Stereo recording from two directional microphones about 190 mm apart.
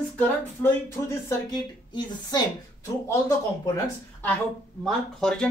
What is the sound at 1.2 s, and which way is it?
A woman's voice, 20° left (ahead or behind).